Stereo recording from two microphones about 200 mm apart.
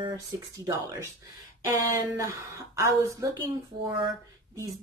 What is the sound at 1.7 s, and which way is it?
Speech, 15° right (ahead or behind).